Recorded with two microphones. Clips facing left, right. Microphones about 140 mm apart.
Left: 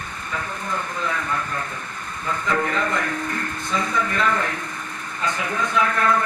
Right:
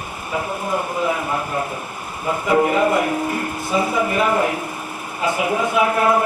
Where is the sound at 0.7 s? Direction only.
15° right (ahead or behind).